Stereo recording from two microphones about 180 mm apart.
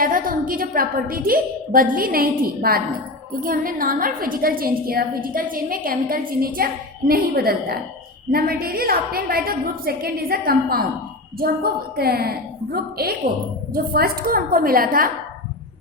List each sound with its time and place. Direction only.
0.0 s a woman's voice: 50° right (ahead or behind)